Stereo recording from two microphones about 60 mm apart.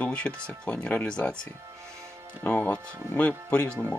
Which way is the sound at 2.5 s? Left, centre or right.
Left.